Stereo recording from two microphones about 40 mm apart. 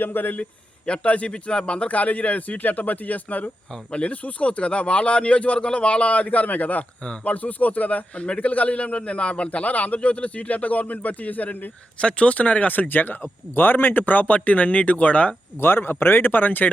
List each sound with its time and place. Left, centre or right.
0.0 s speech: left
0.9 s a man's voice: left
1.9 s a man's voice: left
7.0 s speech: left
7.3 s a man's voice: left
11.9 s a man's voice: left
15.6 s speech: left